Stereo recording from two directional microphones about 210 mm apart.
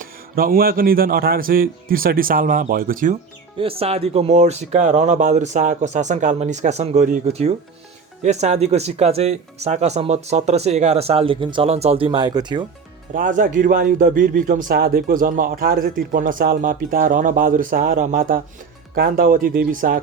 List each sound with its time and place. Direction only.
0.0 s speech: 45° right (ahead or behind)
3.6 s a man's voice: 25° right (ahead or behind)
13.1 s a man's voice: 40° right (ahead or behind)